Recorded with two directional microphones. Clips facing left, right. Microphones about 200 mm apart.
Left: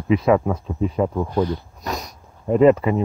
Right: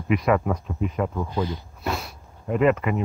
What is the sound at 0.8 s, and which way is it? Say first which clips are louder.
Speech: left 5 dB; 35° left (ahead or behind).